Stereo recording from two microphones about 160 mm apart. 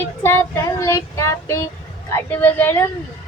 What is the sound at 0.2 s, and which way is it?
Child singing, 15° left (ahead or behind).